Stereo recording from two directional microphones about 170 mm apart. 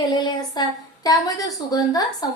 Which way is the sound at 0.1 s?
25° left (ahead or behind).